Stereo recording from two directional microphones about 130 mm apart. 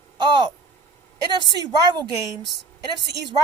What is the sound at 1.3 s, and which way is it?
Speech, 35° right (ahead or behind).